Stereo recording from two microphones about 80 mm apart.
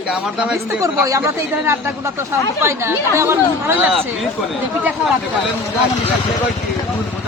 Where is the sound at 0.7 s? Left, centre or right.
Right.